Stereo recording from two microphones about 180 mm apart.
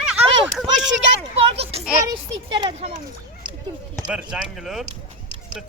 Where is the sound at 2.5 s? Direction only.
30° right (ahead or behind).